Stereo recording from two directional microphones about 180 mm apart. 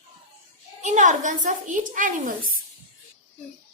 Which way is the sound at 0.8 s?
45° right (ahead or behind).